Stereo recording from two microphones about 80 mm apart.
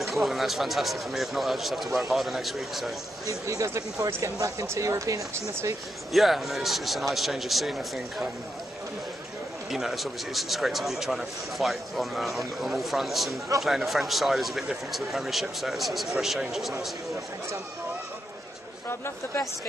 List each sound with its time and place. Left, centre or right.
0.0 s speech: centre
3.3 s speech: right
6.1 s speech: centre
9.7 s speech: centre